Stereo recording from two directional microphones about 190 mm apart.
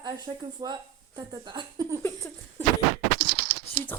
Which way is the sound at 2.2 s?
10° left (ahead or behind).